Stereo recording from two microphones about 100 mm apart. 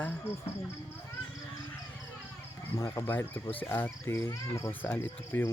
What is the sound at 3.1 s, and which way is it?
Speech, 20° left (ahead or behind).